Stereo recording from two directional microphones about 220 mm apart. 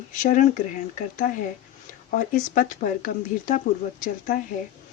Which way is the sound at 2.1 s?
35° left (ahead or behind).